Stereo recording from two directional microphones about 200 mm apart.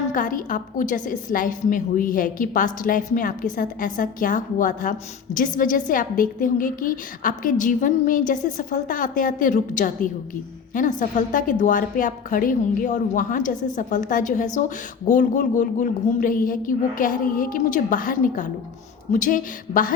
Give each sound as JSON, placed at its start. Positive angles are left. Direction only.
{"t": 0.1, "sound": "a woman's voice", "side_deg": 40}